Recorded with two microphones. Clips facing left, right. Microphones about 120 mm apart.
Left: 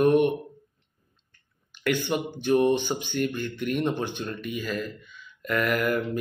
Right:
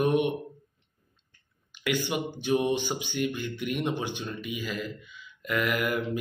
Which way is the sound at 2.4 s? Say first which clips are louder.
Left 5 dB; 15° right (ahead or behind).